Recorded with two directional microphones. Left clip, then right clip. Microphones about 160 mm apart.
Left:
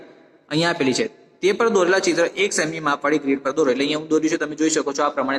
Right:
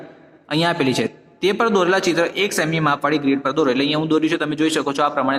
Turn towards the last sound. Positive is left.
turn(degrees=-25)  # may be behind; listen again after turning